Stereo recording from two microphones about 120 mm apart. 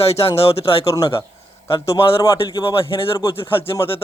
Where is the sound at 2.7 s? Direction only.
50° left (ahead or behind).